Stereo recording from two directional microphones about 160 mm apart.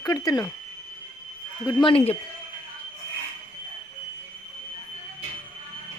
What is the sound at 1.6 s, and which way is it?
Speech, 25° left (ahead or behind).